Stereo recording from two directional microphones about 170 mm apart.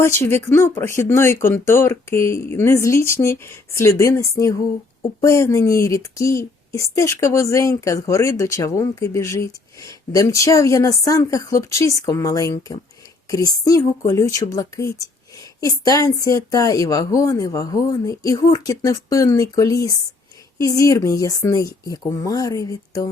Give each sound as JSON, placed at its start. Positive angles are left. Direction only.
{"t": 0.0, "sound": "a woman's voice", "side_deg": 15}